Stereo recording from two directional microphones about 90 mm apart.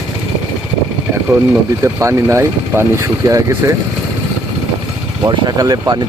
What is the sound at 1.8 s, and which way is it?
Speech, 30° right (ahead or behind).